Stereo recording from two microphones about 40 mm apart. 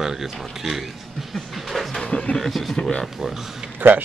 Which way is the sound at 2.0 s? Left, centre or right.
Left.